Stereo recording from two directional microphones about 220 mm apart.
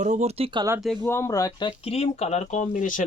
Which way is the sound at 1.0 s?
10° left (ahead or behind).